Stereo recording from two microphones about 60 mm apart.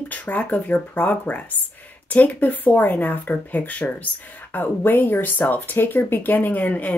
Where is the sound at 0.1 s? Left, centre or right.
Left.